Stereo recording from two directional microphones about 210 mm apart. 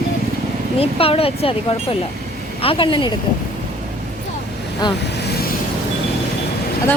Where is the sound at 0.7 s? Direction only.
25° left (ahead or behind).